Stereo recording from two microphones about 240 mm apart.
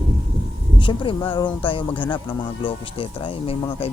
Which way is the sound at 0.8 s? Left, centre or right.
Left.